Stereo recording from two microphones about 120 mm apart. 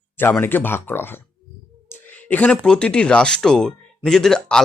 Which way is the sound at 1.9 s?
15° left (ahead or behind).